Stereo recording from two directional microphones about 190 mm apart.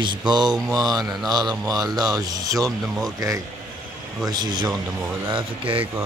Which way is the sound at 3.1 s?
15° right (ahead or behind).